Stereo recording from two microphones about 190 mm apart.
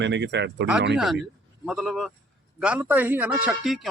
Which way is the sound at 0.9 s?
Centre (ahead or behind).